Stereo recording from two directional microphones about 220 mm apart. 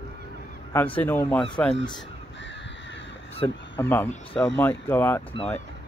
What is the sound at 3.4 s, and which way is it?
Speech, 20° left (ahead or behind).